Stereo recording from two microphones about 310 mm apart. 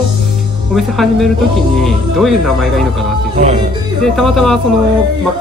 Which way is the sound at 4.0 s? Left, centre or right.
Centre.